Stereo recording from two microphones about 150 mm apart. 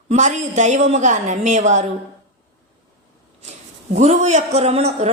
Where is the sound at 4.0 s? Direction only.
50° right (ahead or behind).